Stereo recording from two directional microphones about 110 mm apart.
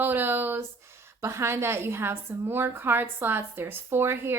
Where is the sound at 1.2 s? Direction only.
25° right (ahead or behind).